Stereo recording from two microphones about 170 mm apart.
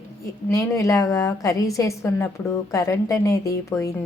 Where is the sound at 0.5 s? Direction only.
20° left (ahead or behind).